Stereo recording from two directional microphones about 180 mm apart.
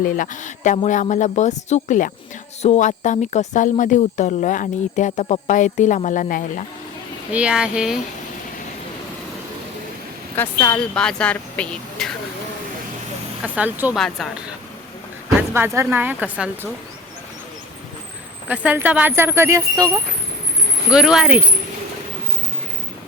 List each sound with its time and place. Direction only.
0.0 s speech: 50° left (ahead or behind)
7.3 s speech: 5° right (ahead or behind)
10.3 s speech: 10° left (ahead or behind)
13.4 s speech: 10° right (ahead or behind)
15.4 s speech: 10° right (ahead or behind)
18.4 s speech: 10° right (ahead or behind)
20.9 s speech: 5° right (ahead or behind)